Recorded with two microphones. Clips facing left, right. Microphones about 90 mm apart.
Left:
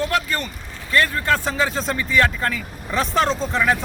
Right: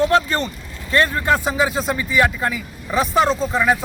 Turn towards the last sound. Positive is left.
turn(degrees=-10)  # may be behind; listen again after turning